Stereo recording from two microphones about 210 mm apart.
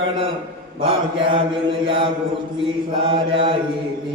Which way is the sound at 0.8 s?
25° right (ahead or behind).